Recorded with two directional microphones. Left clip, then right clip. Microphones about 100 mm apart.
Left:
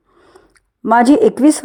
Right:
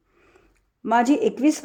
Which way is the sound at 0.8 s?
45° left (ahead or behind).